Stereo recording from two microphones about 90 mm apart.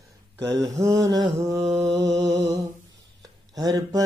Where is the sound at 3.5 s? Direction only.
45° right (ahead or behind).